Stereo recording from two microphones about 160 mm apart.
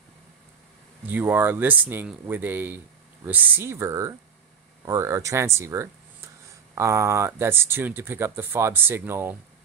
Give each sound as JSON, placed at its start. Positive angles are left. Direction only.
{"t": 1.0, "sound": "speech", "side_deg": -10}